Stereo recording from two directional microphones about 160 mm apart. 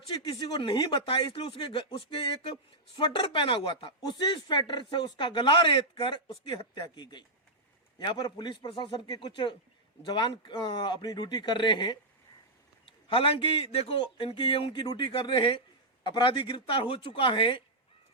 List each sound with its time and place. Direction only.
0.3 s speech: 25° left (ahead or behind)